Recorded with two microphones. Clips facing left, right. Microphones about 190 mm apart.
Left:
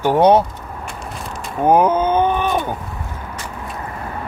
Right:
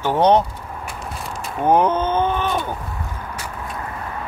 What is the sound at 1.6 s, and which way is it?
Rowboat, 10° left (ahead or behind).